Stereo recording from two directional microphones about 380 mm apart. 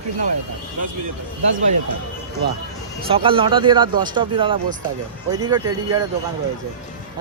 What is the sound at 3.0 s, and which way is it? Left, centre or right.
Speech, centre.